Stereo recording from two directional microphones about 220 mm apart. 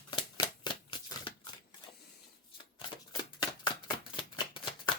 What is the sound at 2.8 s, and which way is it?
Scissors, 20° left (ahead or behind).